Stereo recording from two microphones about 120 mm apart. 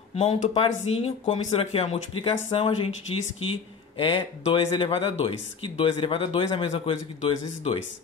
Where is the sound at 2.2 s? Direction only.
50° left (ahead or behind).